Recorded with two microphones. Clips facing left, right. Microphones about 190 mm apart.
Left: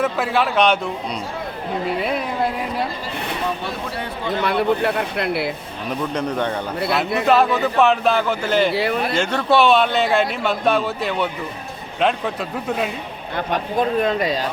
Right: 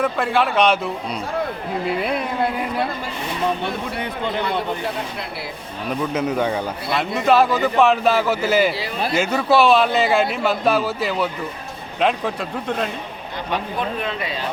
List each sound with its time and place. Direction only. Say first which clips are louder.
0.0 s a man's voice: even; centre (ahead or behind)
4.4 s a man's voice: left 5 dB; 65° left (ahead or behind)
6.0 s a man's voice: right 2 dB; 5° right (ahead or behind)
8.7 s a man's voice: left 8 dB; 60° left (ahead or behind)
9.1 s a man's voice: right 2 dB; 5° right (ahead or behind)
13.3 s a man's voice: left 4 dB; 45° left (ahead or behind)